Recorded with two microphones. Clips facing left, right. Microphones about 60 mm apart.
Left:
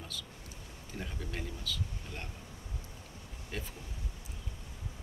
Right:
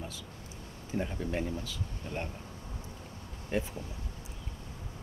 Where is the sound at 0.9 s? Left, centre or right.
Right.